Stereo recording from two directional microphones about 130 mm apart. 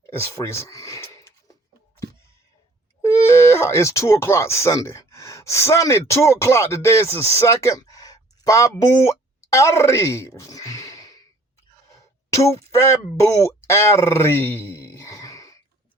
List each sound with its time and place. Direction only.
0.1 s speech: 20° left (ahead or behind)
3.0 s speech: 20° left (ahead or behind)
8.8 s a sound: 25° left (ahead or behind)
12.3 s speech: 25° left (ahead or behind)